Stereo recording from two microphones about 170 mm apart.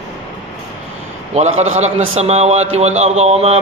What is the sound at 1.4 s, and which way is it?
A man's voice, 40° right (ahead or behind).